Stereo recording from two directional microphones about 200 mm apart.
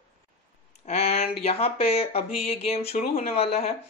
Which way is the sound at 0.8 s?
30° left (ahead or behind).